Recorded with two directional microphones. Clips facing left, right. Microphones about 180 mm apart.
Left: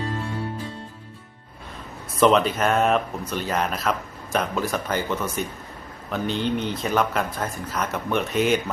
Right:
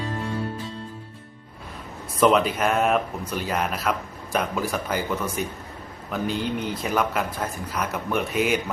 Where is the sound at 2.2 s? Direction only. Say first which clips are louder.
Left 1 dB; 5° right (ahead or behind).